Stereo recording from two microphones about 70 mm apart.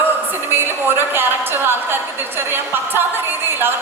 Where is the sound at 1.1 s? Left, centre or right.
Right.